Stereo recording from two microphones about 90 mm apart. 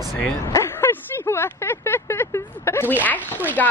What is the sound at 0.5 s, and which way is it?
Speech, 30° left (ahead or behind).